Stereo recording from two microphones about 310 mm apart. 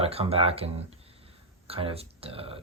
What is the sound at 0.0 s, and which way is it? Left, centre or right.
Speech, centre.